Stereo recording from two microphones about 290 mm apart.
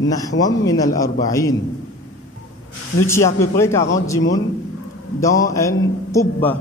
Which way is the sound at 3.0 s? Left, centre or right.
Centre.